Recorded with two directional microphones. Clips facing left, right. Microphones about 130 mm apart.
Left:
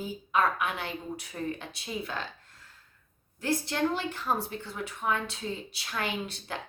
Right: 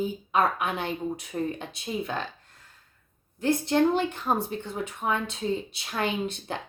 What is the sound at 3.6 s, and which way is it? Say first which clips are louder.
A woman's voice: right 7 dB; 20° right (ahead or behind).